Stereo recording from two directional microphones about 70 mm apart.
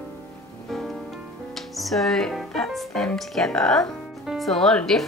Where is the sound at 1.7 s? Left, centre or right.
Centre.